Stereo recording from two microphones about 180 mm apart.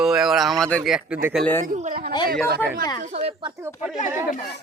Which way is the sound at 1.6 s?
45° right (ahead or behind).